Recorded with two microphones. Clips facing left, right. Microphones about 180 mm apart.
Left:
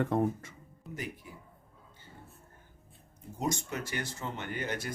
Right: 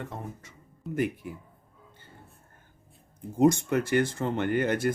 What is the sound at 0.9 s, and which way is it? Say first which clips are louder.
Speech: right 12 dB; 60° right (ahead or behind).